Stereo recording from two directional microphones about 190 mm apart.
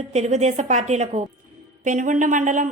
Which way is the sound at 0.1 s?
35° right (ahead or behind).